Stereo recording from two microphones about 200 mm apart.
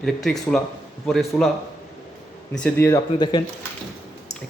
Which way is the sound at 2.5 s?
5° left (ahead or behind).